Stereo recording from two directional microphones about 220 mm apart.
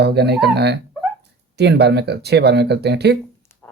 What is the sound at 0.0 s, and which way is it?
Speech, 50° right (ahead or behind).